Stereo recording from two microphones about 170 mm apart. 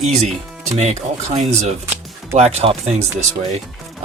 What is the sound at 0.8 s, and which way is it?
Speech, 40° right (ahead or behind).